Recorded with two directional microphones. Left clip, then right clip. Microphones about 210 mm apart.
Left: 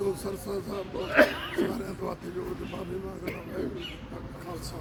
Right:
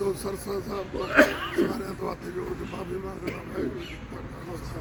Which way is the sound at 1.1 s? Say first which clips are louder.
Right 2 dB; 55° right (ahead or behind).